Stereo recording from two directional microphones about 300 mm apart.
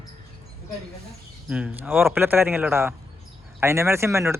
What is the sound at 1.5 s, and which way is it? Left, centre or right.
Speech, centre.